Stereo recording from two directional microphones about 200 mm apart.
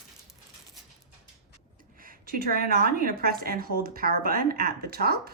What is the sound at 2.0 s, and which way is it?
A woman's voice, 45° right (ahead or behind).